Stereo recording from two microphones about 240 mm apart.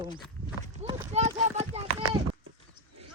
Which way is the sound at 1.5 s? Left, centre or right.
Right.